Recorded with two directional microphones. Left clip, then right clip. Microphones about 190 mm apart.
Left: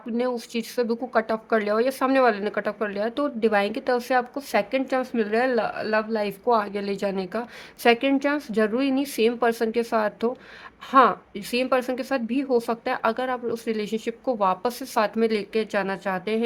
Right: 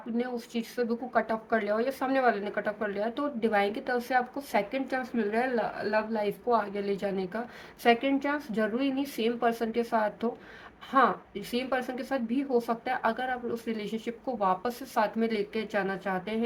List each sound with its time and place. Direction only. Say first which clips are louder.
0.2 s speech: left 7 dB; 55° left (ahead or behind)